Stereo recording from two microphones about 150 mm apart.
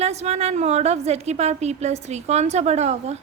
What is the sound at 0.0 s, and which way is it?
A woman's voice, 45° right (ahead or behind).